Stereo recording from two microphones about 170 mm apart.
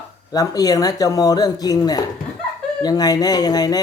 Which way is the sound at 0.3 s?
20° left (ahead or behind).